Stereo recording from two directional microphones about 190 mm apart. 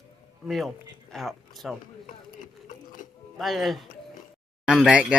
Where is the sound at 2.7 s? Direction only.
45° left (ahead or behind).